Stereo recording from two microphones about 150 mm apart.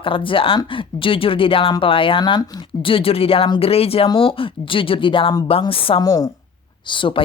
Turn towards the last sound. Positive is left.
turn(degrees=30)  # may be behind; listen again after turning